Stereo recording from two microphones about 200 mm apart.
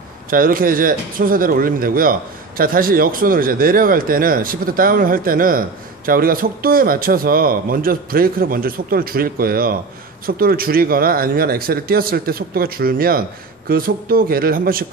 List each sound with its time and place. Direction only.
0.3 s speech: 45° right (ahead or behind)